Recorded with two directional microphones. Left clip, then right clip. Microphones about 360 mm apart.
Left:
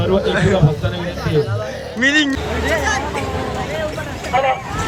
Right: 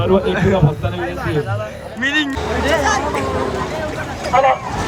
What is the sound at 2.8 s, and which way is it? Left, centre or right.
Speech, centre.